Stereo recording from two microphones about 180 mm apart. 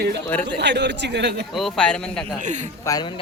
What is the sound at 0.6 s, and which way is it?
Speech, 75° right (ahead or behind).